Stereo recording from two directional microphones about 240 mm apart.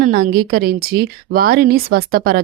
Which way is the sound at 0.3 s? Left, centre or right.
Right.